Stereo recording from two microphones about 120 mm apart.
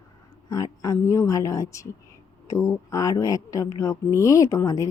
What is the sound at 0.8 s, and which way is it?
Speech, 25° left (ahead or behind).